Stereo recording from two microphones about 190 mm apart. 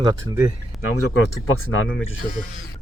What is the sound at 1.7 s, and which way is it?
Speech, 90° left.